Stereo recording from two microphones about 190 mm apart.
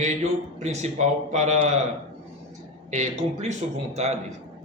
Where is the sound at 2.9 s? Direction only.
35° right (ahead or behind).